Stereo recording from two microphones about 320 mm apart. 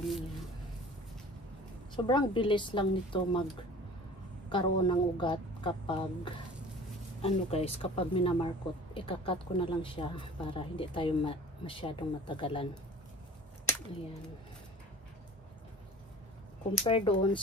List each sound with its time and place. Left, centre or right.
2.0 s a woman's voice: centre
4.5 s a woman's voice: centre
16.8 s a woman's voice: centre